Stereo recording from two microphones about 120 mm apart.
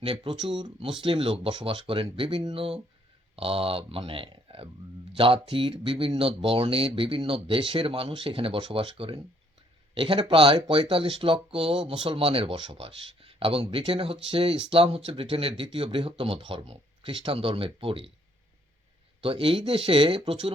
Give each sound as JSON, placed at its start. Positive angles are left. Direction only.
{"t": 0.0, "sound": "speech", "side_deg": -55}
{"t": 0.3, "sound": "speech", "side_deg": -40}
{"t": 19.2, "sound": "speech", "side_deg": -50}